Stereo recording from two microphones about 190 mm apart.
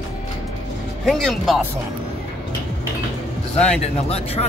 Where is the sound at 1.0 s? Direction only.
Centre (ahead or behind).